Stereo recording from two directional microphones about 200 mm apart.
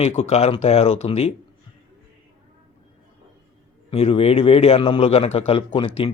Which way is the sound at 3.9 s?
30° left (ahead or behind).